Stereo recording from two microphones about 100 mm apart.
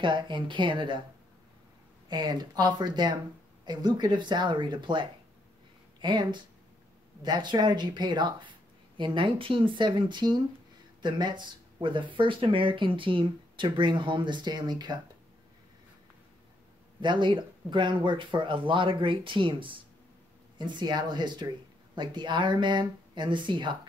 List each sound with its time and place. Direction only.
0.0 s speech: 55° right (ahead or behind)
2.0 s speech: 45° right (ahead or behind)
17.0 s speech: 50° right (ahead or behind)